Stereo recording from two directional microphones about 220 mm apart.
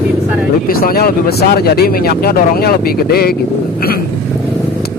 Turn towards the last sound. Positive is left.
turn(degrees=45)  # may be behind; listen again after turning